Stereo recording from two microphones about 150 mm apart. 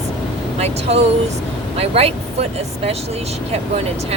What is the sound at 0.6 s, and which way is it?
Speech, 45° right (ahead or behind).